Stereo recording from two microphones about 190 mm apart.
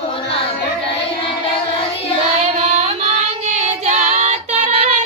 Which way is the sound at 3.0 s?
35° right (ahead or behind).